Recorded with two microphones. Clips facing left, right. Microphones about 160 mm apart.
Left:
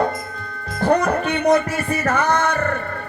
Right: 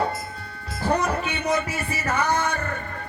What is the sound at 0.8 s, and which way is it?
Music, 60° left (ahead or behind).